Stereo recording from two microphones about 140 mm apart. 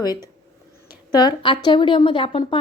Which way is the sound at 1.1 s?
30° left (ahead or behind).